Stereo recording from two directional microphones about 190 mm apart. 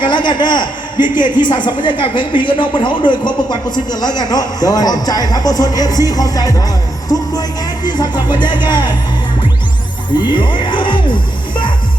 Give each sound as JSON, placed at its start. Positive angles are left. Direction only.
{"t": 0.0, "sound": "a man's voice", "side_deg": 25}
{"t": 7.9, "sound": "a man's voice", "side_deg": 25}
{"t": 10.2, "sound": "speech", "side_deg": 25}